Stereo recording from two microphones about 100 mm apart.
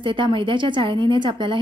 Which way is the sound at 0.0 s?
55° right (ahead or behind).